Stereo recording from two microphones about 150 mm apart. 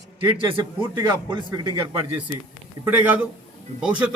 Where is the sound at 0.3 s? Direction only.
35° right (ahead or behind).